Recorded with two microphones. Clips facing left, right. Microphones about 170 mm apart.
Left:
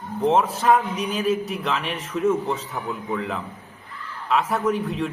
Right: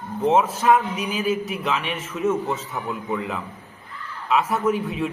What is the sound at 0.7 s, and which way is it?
A man's voice, 5° right (ahead or behind).